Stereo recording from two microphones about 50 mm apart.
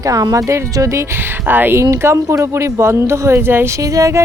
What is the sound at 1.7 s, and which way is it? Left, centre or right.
Speech, right.